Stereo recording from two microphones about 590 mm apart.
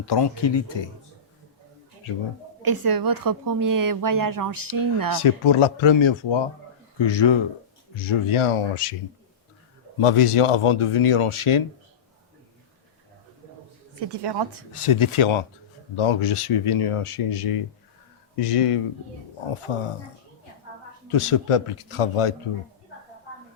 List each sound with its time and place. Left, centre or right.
0.0 s speech: left
2.6 s a woman's voice: right
5.2 s speech: left
10.0 s speech: left
14.0 s a woman's voice: right
14.7 s speech: left
21.1 s speech: left